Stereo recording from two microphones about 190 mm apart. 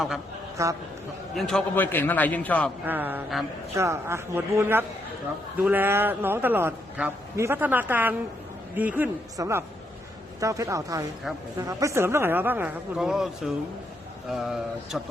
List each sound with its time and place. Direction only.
0.5 s a man's voice: 15° right (ahead or behind)
1.4 s a man's voice: 5° left (ahead or behind)
2.8 s a man's voice: 10° right (ahead or behind)